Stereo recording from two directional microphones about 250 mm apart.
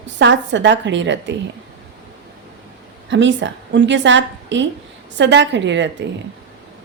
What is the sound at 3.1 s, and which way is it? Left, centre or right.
A man's voice, right.